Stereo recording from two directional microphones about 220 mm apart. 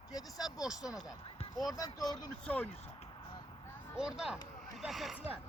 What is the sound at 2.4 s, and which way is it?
Speech, 5° left (ahead or behind).